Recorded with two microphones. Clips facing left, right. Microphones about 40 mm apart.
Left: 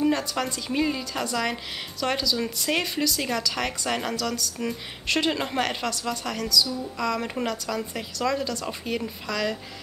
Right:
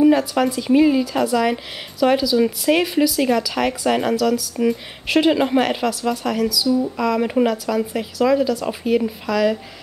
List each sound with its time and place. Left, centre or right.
0.0 s speech: centre